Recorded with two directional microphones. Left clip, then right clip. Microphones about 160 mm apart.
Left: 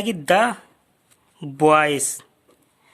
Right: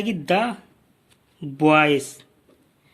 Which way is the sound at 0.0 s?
50° left (ahead or behind).